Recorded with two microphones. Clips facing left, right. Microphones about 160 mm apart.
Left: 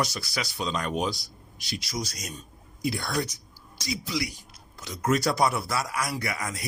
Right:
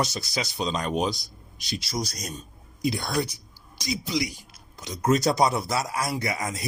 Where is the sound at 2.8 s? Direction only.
20° right (ahead or behind).